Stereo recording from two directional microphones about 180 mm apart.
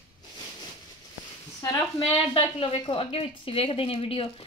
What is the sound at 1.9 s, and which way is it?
A woman's voice, 30° left (ahead or behind).